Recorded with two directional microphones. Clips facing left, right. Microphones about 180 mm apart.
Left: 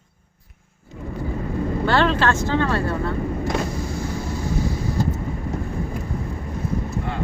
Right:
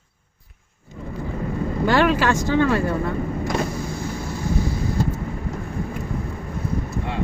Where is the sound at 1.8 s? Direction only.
15° right (ahead or behind).